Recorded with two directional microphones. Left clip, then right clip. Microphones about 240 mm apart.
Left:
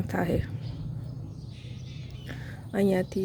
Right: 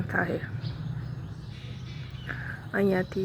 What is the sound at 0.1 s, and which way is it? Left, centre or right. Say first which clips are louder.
Speech: right 1 dB; left.